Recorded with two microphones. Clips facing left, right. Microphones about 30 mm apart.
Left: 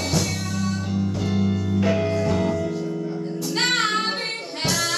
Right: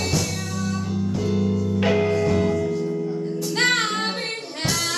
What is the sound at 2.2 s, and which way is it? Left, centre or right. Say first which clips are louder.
Music: right 2 dB; centre.